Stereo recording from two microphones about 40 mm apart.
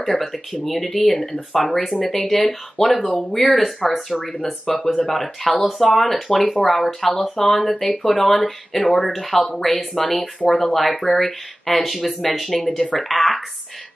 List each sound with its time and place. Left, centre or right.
0.2 s speech: centre
1.1 s speech: centre
1.5 s speech: centre
7.5 s speech: left
7.8 s speech: centre